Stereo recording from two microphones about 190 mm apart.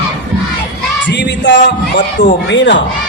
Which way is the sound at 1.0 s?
70° left (ahead or behind).